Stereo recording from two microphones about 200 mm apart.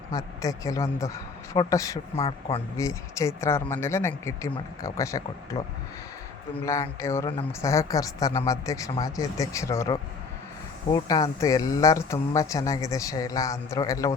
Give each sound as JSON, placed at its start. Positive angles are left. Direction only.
{"t": 0.1, "sound": "speech", "side_deg": 15}
{"t": 6.7, "sound": "speech", "side_deg": 15}